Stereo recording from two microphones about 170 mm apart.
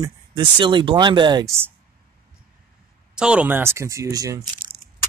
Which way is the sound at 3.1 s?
5° right (ahead or behind).